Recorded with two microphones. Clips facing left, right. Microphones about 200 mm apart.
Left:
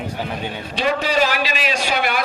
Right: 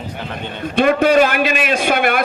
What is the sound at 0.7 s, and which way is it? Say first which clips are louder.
A man's voice: right 8 dB; 55° right (ahead or behind).